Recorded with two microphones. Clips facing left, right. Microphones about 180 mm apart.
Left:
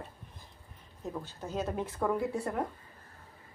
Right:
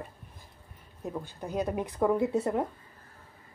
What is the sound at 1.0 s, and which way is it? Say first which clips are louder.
A woman's voice: right 3 dB; 15° right (ahead or behind).